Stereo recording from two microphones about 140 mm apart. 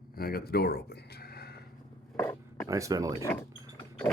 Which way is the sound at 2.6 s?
25° right (ahead or behind).